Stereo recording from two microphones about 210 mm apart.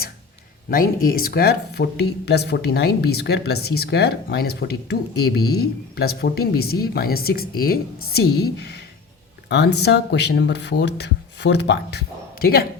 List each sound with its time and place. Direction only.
0.7 s speech: 45° left (ahead or behind)